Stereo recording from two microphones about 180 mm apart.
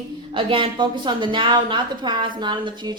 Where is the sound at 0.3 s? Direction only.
30° right (ahead or behind).